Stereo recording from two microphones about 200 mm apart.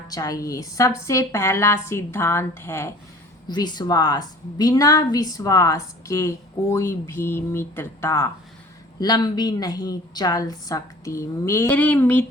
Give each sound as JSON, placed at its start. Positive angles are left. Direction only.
{"t": 0.1, "sound": "a woman's voice", "side_deg": 15}